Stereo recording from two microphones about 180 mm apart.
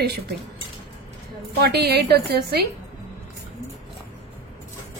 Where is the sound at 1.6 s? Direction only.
65° right (ahead or behind).